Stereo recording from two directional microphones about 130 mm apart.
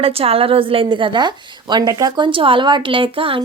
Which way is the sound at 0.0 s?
50° right (ahead or behind).